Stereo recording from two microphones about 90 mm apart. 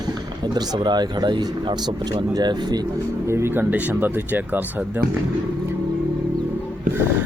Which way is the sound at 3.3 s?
30° right (ahead or behind).